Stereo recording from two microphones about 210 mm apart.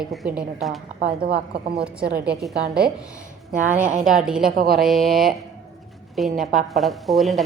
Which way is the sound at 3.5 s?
40° right (ahead or behind).